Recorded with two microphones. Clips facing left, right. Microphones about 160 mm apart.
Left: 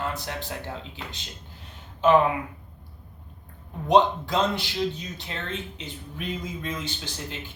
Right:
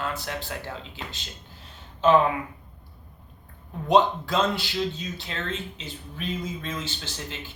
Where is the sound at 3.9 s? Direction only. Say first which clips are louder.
Left 1 dB; 20° left (ahead or behind).